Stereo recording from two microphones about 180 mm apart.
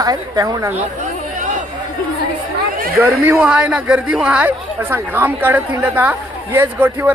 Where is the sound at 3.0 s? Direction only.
10° right (ahead or behind).